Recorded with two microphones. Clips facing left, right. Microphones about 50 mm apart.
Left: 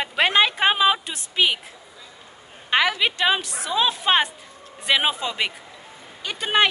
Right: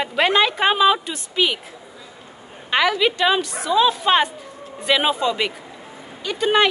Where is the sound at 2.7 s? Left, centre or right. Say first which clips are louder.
Right 2 dB; centre.